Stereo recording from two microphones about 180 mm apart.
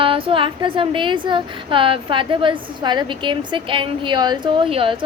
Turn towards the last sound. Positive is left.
turn(degrees=-30)  # may be behind; listen again after turning